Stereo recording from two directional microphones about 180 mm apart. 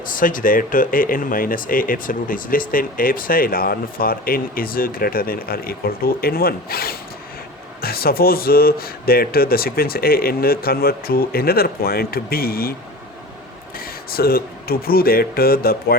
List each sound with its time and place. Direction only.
0.0 s speech: 50° left (ahead or behind)
13.7 s speech: 55° left (ahead or behind)